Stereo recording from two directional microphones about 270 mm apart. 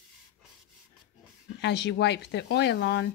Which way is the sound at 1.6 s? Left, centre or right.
Left.